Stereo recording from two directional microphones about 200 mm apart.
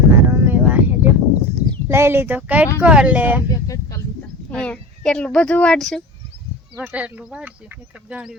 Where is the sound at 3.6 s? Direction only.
15° left (ahead or behind).